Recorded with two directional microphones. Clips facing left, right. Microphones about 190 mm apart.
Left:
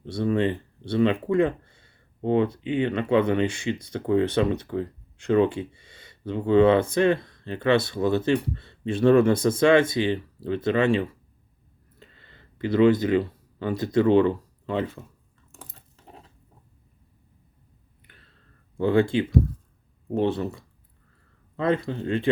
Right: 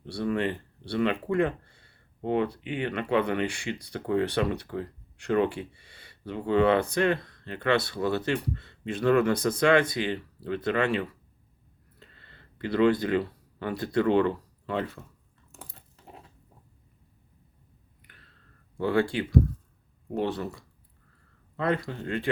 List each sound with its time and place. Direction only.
0.0 s speech: 20° left (ahead or behind)
18.8 s speech: 20° left (ahead or behind)